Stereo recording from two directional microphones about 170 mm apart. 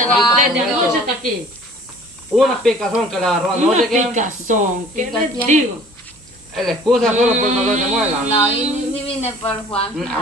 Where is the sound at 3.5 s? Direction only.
45° right (ahead or behind).